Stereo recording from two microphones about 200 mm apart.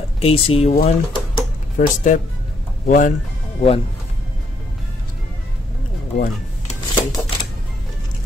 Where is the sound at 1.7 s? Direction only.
40° left (ahead or behind).